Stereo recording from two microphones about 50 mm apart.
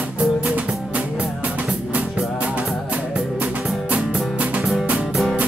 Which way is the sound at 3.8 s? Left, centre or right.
Right.